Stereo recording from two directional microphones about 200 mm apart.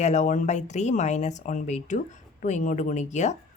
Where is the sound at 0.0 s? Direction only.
35° left (ahead or behind).